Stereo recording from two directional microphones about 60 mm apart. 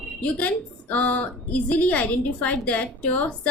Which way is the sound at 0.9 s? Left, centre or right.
Left.